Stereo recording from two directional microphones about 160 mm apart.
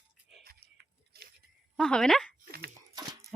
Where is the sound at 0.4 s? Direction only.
90° right.